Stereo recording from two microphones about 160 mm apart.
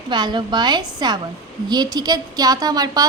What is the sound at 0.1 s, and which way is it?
A woman's voice, 30° right (ahead or behind).